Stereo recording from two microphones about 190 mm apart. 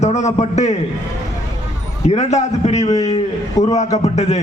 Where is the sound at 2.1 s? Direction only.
35° left (ahead or behind).